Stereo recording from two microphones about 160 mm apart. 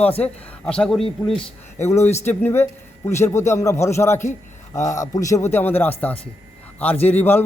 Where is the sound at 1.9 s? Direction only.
15° left (ahead or behind).